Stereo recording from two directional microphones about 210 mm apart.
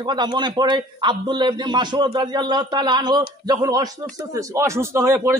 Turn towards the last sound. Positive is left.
turn(degrees=-10)  # may be behind; listen again after turning